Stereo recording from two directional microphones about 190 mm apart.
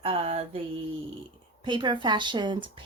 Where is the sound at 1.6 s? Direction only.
25° right (ahead or behind).